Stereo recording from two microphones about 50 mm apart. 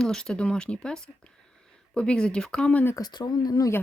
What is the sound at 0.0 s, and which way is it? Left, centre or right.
Speech, centre.